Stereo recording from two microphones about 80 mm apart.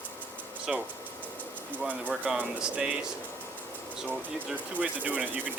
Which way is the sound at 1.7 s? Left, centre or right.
Right.